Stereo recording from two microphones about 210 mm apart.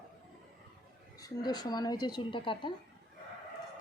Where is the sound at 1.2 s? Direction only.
20° left (ahead or behind).